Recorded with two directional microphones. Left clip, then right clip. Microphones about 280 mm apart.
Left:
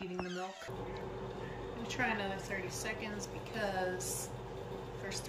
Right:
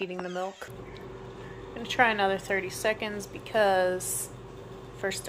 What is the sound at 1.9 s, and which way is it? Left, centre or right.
A woman's voice, centre.